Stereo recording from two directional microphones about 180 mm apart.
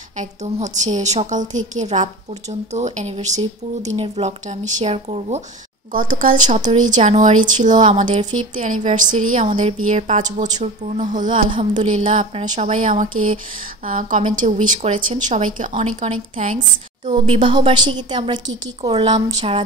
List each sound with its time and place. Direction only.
0.2 s speech: 40° right (ahead or behind)
5.9 s a woman's voice: 45° right (ahead or behind)
17.3 s a woman's voice: 25° right (ahead or behind)